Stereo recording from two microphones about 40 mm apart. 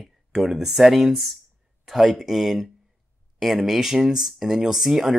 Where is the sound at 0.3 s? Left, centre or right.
Centre.